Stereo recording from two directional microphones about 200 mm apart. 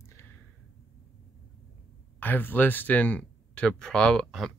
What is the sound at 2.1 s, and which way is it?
Speech, 10° left (ahead or behind).